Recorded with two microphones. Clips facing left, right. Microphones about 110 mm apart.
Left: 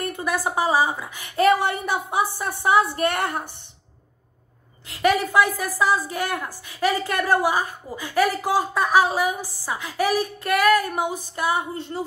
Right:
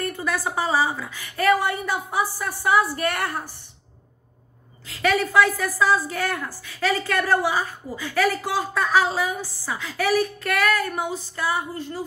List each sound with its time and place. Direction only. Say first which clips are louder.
0.0 s a woman's voice: left 1 dB; 15° left (ahead or behind)
4.8 s a woman's voice: left 2 dB; 15° left (ahead or behind)